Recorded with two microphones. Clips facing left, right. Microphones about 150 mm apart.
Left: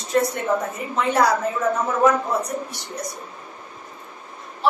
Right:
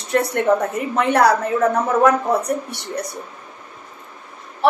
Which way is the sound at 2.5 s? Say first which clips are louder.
Right 5 dB; 65° right (ahead or behind).